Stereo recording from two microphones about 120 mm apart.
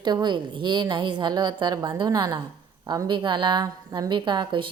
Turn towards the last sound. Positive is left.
turn(degrees=-40)  # may be behind; listen again after turning